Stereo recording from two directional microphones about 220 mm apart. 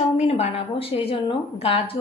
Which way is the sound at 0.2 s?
30° left (ahead or behind).